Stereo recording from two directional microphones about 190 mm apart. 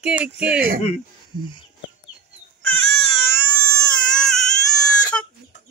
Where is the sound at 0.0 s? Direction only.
5° right (ahead or behind).